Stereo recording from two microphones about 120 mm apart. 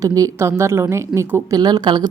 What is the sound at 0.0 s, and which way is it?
A woman's voice, 30° right (ahead or behind).